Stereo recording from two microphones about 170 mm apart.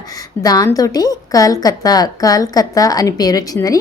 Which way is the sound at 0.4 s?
20° left (ahead or behind).